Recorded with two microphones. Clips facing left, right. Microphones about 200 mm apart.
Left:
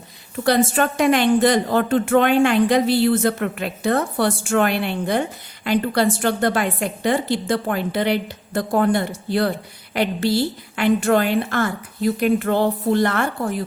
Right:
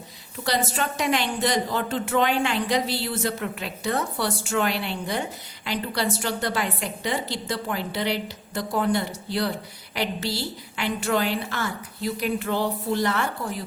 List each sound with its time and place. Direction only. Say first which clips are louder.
0.3 s a woman's voice: left 8 dB; 55° left (ahead or behind)